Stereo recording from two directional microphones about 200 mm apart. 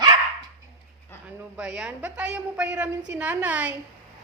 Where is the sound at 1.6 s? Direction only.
5° right (ahead or behind).